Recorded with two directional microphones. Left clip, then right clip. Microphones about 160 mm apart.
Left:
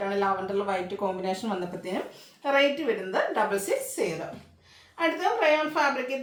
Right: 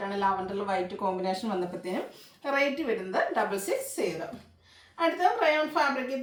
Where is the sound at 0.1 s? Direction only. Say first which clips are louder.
Even; 15° left (ahead or behind).